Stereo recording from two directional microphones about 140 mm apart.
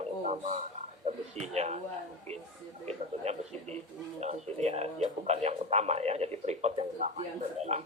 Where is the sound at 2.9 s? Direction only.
50° right (ahead or behind).